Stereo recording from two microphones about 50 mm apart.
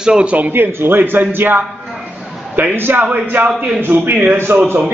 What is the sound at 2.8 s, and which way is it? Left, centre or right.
Speech, right.